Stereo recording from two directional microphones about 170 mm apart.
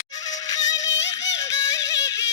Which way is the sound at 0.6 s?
90° left.